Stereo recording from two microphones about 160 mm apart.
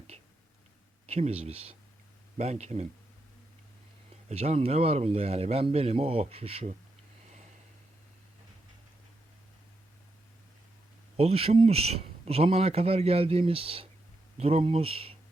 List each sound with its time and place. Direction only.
1.0 s speech: 40° right (ahead or behind)
4.3 s speech: 40° right (ahead or behind)
11.2 s speech: 40° right (ahead or behind)